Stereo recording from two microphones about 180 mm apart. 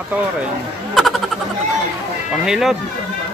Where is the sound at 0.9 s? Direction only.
Centre (ahead or behind).